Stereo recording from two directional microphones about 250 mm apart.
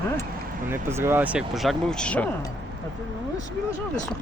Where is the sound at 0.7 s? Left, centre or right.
Centre.